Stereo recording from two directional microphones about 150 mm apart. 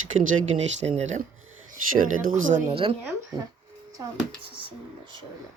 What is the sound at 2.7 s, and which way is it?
Speech, 40° right (ahead or behind).